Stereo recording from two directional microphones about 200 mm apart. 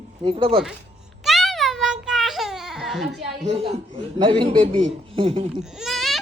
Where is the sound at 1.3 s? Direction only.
Centre (ahead or behind).